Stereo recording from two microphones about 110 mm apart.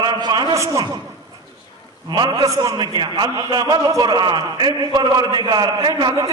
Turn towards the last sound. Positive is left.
turn(degrees=-40)  # may be behind; listen again after turning